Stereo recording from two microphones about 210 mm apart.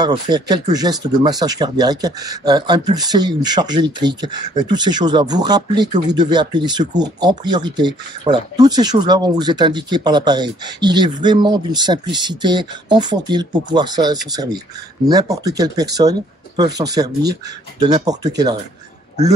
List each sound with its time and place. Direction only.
0.0 s speech: 20° right (ahead or behind)